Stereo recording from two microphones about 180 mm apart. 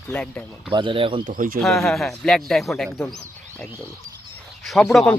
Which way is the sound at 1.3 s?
50° right (ahead or behind).